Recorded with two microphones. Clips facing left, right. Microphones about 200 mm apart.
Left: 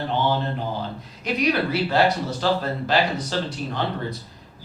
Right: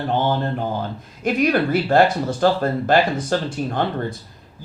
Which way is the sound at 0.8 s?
50° right (ahead or behind).